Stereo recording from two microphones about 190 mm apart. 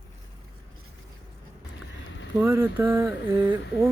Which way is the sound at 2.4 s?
10° right (ahead or behind).